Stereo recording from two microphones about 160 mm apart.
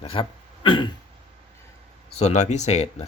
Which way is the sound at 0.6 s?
30° left (ahead or behind).